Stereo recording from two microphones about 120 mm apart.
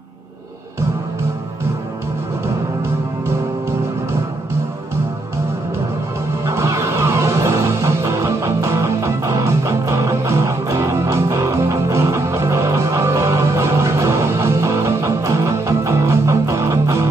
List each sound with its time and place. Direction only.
6.4 s music: 25° right (ahead or behind)